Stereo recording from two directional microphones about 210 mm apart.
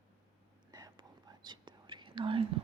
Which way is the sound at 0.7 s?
20° right (ahead or behind).